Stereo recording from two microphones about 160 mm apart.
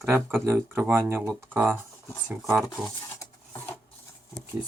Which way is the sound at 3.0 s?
20° left (ahead or behind).